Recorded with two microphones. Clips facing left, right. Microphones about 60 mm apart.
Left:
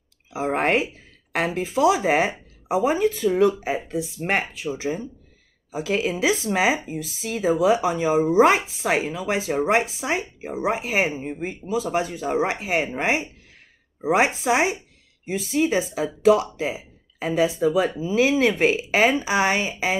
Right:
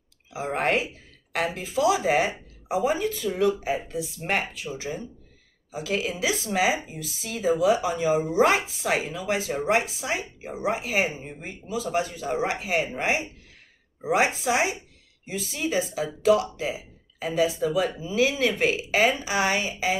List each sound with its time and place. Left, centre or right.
0.3 s speech: left